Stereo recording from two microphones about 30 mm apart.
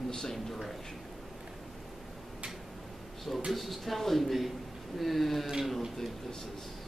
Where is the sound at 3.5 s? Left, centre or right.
Centre.